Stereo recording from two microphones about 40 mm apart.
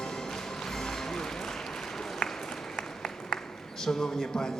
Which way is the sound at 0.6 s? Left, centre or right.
Centre.